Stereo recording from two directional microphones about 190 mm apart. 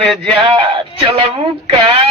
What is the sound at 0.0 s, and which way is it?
Male singing, 5° left (ahead or behind).